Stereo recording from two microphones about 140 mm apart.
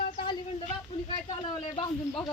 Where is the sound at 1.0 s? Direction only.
35° left (ahead or behind).